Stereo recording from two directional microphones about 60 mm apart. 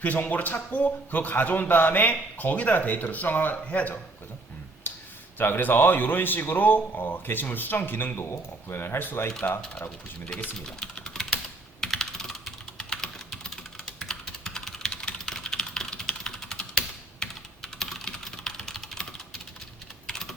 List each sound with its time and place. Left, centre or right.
0.0 s a man's voice: left
4.9 s a sound: left
5.4 s a man's voice: left
8.1 s a man's voice: left
10.7 s typing: centre
14.0 s computer keyboard: centre
20.1 s typing: centre